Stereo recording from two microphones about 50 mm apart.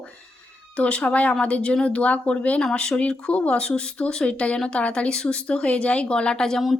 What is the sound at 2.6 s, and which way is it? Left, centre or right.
Speech, centre.